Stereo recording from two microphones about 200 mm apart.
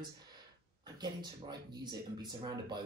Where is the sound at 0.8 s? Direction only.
20° right (ahead or behind).